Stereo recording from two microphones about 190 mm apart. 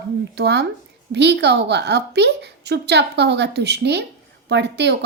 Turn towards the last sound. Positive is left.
turn(degrees=-65)  # may be behind; listen again after turning